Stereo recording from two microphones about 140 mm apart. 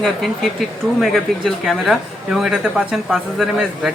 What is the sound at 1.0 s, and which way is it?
Speech, centre (ahead or behind).